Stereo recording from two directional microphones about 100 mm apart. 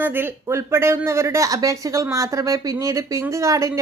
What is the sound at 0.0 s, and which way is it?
Speech, 25° right (ahead or behind).